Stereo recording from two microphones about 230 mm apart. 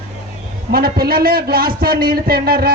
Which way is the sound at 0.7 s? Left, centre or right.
Right.